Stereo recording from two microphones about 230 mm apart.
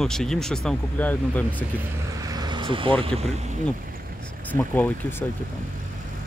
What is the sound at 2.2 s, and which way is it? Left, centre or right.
Vehicle, centre.